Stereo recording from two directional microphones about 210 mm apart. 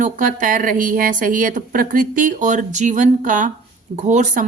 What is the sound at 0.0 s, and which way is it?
A woman's voice, 40° right (ahead or behind).